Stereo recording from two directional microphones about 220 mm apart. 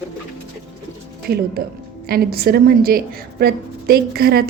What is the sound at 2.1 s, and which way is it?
A woman's voice, 45° right (ahead or behind).